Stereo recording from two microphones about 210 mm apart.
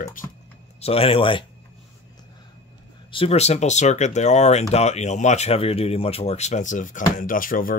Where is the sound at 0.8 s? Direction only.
25° left (ahead or behind).